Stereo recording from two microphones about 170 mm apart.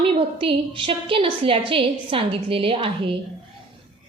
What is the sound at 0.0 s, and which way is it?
A woman's voice, 30° right (ahead or behind).